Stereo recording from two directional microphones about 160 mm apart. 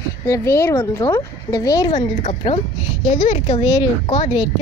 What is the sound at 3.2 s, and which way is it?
Speech, 40° left (ahead or behind).